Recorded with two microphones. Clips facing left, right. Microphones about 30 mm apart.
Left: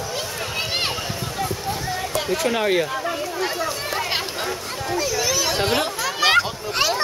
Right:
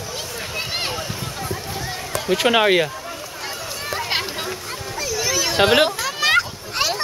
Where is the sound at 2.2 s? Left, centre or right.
Right.